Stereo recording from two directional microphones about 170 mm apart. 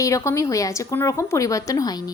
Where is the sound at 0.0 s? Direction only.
20° left (ahead or behind).